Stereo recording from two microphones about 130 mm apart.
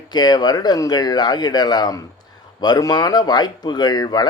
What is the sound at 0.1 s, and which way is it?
Speech, 30° left (ahead or behind).